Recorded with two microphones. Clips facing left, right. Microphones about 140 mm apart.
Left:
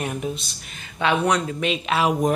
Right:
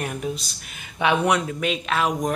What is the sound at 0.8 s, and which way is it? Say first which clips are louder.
Speech: even; 15° right (ahead or behind).